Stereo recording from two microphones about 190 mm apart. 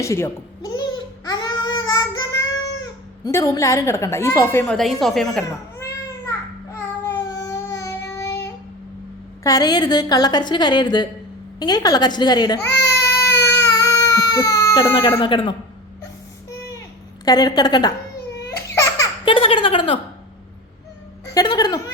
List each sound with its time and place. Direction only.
0.0 s babbling: 15° left (ahead or behind)
2.8 s a woman's voice: 15° left (ahead or behind)
4.6 s a woman's voice: centre (ahead or behind)
7.0 s child singing: 20° left (ahead or behind)
9.4 s a woman's voice: 20° left (ahead or behind)
12.9 s baby cry: 15° left (ahead or behind)
15.2 s a woman's voice: 25° left (ahead or behind)
17.2 s a woman's voice: 20° left (ahead or behind)
18.7 s baby laughter: 15° left (ahead or behind)
19.2 s a sound: 30° left (ahead or behind)
21.3 s a sound: 20° left (ahead or behind)